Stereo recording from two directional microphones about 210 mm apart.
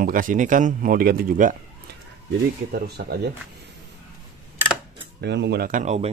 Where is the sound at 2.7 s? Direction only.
50° right (ahead or behind).